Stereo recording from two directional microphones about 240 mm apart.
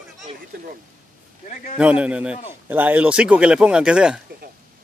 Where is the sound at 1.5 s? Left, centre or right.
Left.